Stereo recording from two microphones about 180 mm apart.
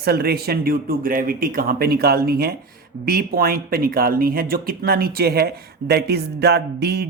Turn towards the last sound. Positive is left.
turn(degrees=-65)  # may be behind; listen again after turning